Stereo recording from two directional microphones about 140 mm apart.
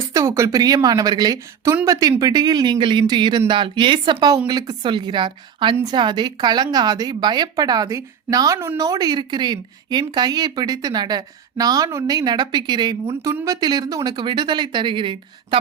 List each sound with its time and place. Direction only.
0.1 s a woman's voice: 20° right (ahead or behind)